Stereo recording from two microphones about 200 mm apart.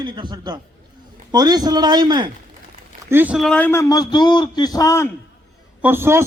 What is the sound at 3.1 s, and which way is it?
A man's voice, 10° right (ahead or behind).